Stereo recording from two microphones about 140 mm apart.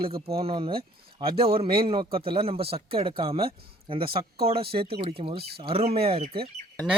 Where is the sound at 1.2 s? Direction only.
90° right.